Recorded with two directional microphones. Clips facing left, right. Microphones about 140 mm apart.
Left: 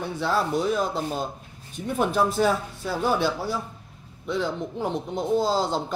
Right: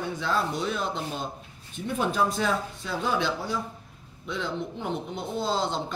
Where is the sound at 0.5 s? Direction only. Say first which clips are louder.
Left 5 dB; 40° left (ahead or behind).